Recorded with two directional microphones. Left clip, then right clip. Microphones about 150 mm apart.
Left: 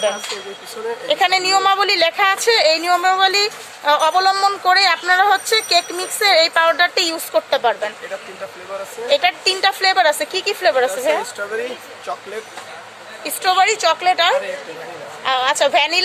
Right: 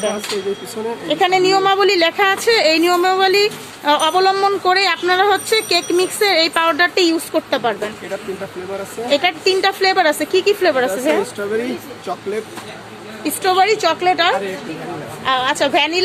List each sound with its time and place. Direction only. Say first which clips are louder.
1.0 s a woman's voice: right 1 dB; 20° left (ahead or behind)
9.0 s a woman's voice: even; 15° left (ahead or behind)
13.2 s a woman's voice: right 1 dB; 10° left (ahead or behind)